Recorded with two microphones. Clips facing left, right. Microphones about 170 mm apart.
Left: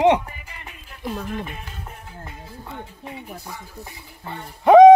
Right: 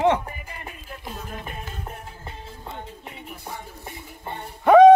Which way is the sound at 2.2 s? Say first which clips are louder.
Left 1 dB; 25° right (ahead or behind).